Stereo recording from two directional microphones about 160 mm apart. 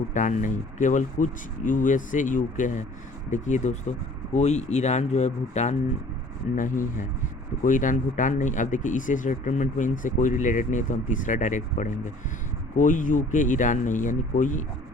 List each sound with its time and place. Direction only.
0.1 s speech: 50° left (ahead or behind)
7.6 s speech: 55° left (ahead or behind)